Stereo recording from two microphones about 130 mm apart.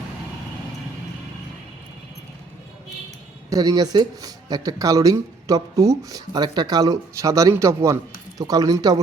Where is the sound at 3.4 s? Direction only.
30° right (ahead or behind).